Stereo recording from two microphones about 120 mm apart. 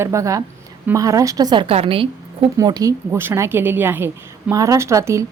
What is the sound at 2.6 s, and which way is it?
A woman's voice, 30° right (ahead or behind).